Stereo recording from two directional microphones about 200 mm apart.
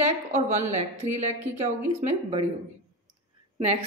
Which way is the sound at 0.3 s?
35° right (ahead or behind).